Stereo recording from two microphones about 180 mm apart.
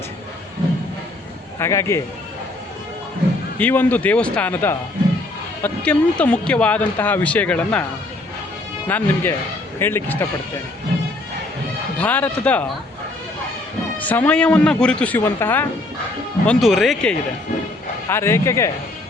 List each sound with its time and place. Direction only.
1.5 s speech: 15° left (ahead or behind)
3.6 s speech: 10° left (ahead or behind)
8.9 s speech: 10° left (ahead or behind)
11.9 s speech: 10° left (ahead or behind)
14.0 s speech: 10° left (ahead or behind)
16.5 s speech: centre (ahead or behind)
18.1 s speech: 15° left (ahead or behind)